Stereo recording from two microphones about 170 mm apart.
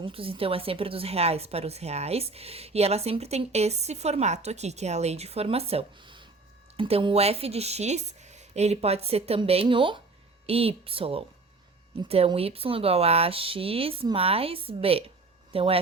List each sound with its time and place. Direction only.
0.0 s speech: 35° right (ahead or behind)